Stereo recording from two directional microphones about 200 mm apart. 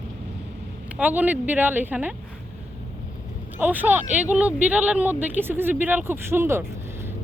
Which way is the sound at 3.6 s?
10° right (ahead or behind).